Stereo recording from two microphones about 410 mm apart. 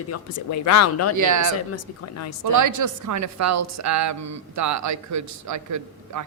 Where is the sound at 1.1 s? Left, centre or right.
Right.